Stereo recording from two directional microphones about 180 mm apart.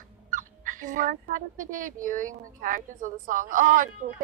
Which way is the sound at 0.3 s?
45° right (ahead or behind).